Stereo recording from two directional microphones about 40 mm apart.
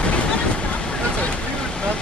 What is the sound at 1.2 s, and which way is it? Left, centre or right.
Speech, left.